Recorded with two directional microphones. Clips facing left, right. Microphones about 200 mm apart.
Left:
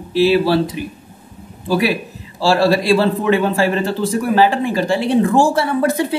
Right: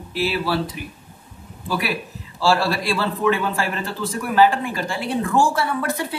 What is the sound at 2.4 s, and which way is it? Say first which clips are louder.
A man's voice: left 6 dB; 25° left (ahead or behind).